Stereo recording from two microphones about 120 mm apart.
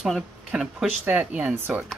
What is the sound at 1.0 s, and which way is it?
Speech, 15° right (ahead or behind).